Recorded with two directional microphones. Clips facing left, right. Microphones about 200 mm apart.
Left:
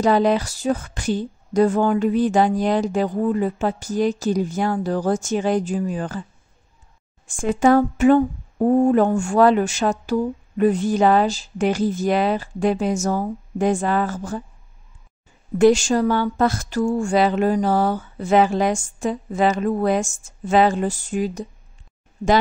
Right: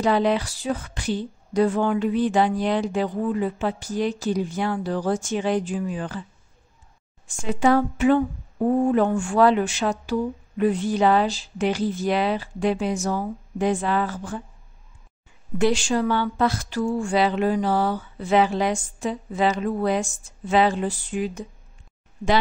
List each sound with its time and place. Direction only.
0.0 s speech: 45° left (ahead or behind)
7.2 s speech: 50° left (ahead or behind)
15.5 s speech: 45° left (ahead or behind)